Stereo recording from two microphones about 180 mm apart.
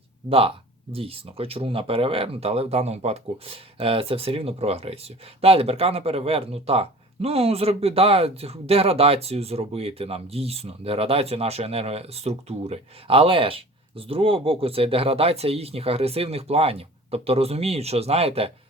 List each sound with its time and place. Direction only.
0.3 s speech: 30° right (ahead or behind)